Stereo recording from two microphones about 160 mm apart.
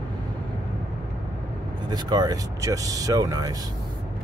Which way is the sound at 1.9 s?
25° right (ahead or behind).